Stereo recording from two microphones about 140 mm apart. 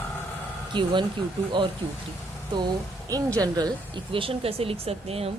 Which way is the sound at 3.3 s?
25° right (ahead or behind).